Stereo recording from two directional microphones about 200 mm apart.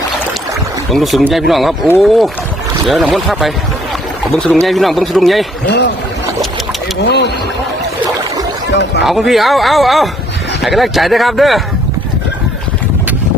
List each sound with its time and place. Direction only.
0.9 s speech: centre (ahead or behind)
4.6 s speech: centre (ahead or behind)
7.0 s speech: 60° left (ahead or behind)
8.7 s speech: 60° left (ahead or behind)
9.0 s speech: centre (ahead or behind)